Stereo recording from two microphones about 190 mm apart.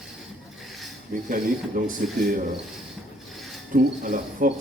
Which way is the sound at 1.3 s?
45° right (ahead or behind).